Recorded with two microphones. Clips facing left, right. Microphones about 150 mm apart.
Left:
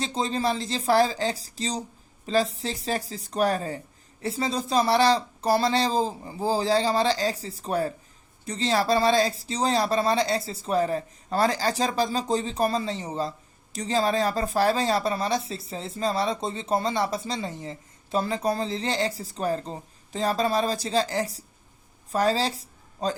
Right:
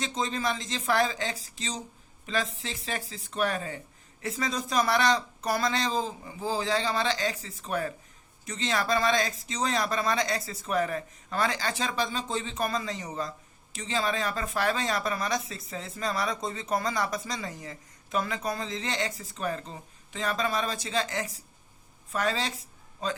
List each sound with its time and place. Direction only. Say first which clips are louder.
0.0 s speech: left 4 dB; 35° left (ahead or behind)